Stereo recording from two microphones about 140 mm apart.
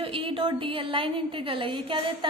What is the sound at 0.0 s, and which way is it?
A woman's voice, 40° right (ahead or behind).